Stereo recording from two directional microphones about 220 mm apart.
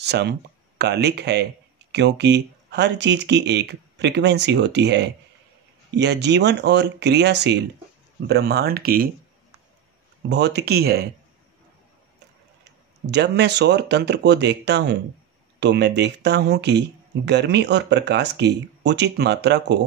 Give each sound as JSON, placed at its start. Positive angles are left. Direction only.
{"t": 0.0, "sound": "speech", "side_deg": -50}
{"t": 10.3, "sound": "speech", "side_deg": -50}
{"t": 13.0, "sound": "speech", "side_deg": -50}